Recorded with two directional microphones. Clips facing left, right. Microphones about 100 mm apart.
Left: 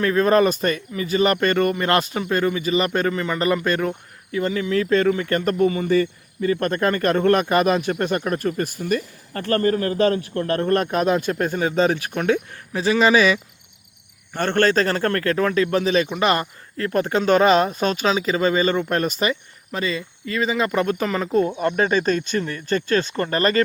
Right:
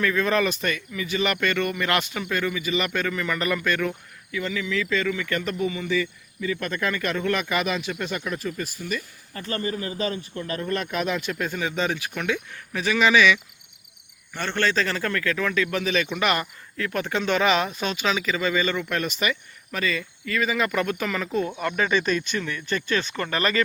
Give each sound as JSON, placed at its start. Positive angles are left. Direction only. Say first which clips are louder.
{"t": 0.0, "sound": "speech", "louder": "left 6 dB", "side_deg": 40}
{"t": 14.3, "sound": "speech", "louder": "left 6 dB", "side_deg": 45}
{"t": 21.8, "sound": "speech", "louder": "left 2 dB", "side_deg": 45}